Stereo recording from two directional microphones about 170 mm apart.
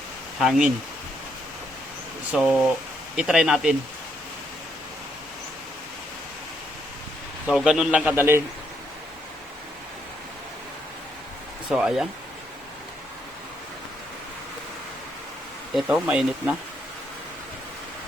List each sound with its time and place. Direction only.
0.3 s speech: centre (ahead or behind)
2.3 s a man's voice: 5° right (ahead or behind)
7.4 s a man's voice: 5° right (ahead or behind)
11.7 s speech: 5° right (ahead or behind)
15.7 s speech: 5° right (ahead or behind)